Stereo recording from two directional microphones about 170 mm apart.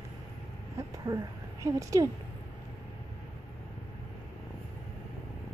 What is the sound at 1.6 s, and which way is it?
Speech, 20° right (ahead or behind).